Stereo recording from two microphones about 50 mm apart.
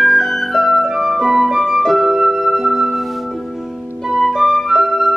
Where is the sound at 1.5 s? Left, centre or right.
Centre.